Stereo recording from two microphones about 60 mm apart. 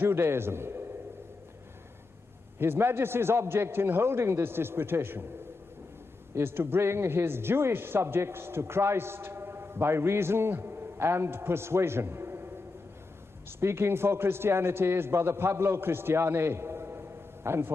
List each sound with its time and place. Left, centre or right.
0.0 s a man's voice: right
2.6 s speech: right
6.3 s speech: right
13.5 s a man's voice: right